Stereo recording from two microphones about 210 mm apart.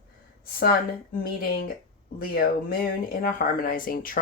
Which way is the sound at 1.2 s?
45° left (ahead or behind).